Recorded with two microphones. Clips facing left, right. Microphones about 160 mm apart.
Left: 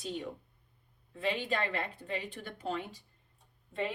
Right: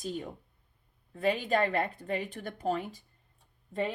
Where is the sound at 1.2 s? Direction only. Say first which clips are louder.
Right 5 dB; 45° right (ahead or behind).